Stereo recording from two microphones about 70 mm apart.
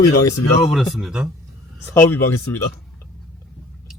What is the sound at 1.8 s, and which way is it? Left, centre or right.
Speech, left.